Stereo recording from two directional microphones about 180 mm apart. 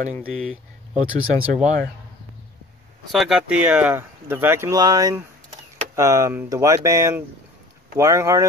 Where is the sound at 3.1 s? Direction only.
Centre (ahead or behind).